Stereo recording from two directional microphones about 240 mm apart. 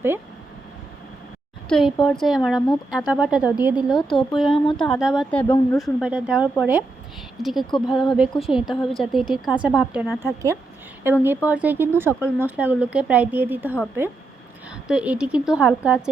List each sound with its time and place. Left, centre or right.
2.0 s a woman's voice: centre
6.0 s a woman's voice: centre
14.8 s a woman's voice: centre